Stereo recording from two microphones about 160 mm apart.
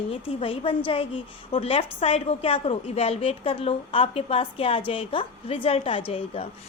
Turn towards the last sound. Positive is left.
turn(degrees=35)  # may be behind; listen again after turning